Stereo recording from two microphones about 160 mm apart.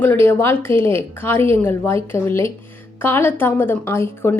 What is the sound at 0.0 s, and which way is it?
A woman's voice, 15° left (ahead or behind).